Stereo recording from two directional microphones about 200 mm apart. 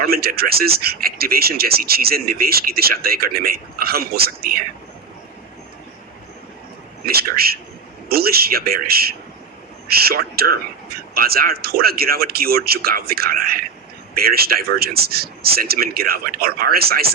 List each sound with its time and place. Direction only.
0.0 s speech: 50° right (ahead or behind)
7.0 s speech: 50° right (ahead or behind)